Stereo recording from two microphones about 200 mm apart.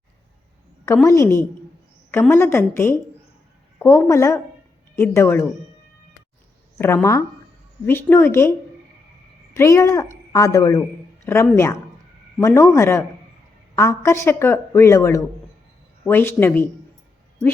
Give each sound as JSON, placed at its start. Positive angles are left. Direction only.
{"t": 1.0, "sound": "speech", "side_deg": 15}
{"t": 6.7, "sound": "speech", "side_deg": 15}
{"t": 9.6, "sound": "speech", "side_deg": 15}